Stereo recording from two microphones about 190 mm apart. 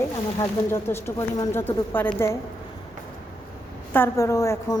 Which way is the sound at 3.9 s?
15° left (ahead or behind).